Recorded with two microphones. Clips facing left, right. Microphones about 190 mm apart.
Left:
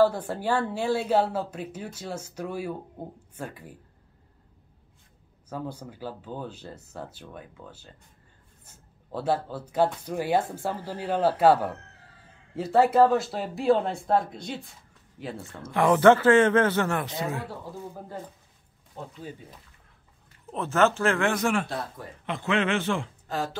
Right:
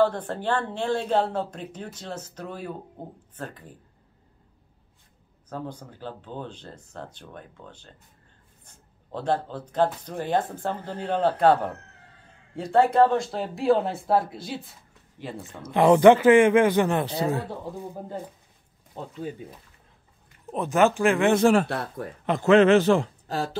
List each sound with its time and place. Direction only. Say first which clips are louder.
0.0 s speech: left 1 dB; 10° left (ahead or behind)
5.5 s speech: even; 10° left (ahead or behind)
15.3 s speech: right 4 dB; 20° right (ahead or behind)
17.0 s a man's voice: right 5 dB; 35° right (ahead or behind)
17.7 s speech: right 3 dB; 15° right (ahead or behind)
20.5 s speech: right 2 dB; 15° right (ahead or behind); by 21.6 s 30° right (ahead or behind)
21.6 s speech: right 3 dB; 55° right (ahead or behind)
22.2 s a man's voice: right 10 dB; 40° right (ahead or behind)